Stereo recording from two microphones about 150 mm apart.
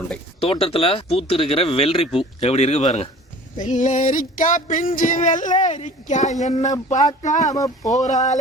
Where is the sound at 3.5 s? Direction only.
55° left (ahead or behind).